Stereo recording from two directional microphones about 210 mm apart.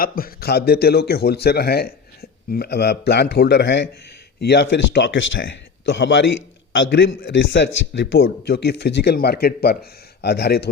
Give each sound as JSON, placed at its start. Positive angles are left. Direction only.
{"t": 0.0, "sound": "speech", "side_deg": 45}